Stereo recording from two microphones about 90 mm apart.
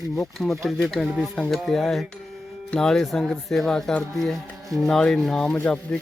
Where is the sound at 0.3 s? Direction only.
Centre (ahead or behind).